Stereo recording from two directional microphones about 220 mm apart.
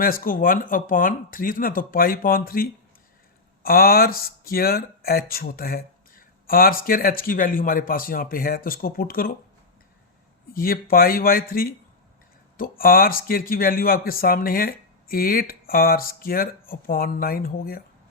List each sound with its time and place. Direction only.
0.0 s speech: 40° left (ahead or behind)
10.5 s speech: 40° left (ahead or behind)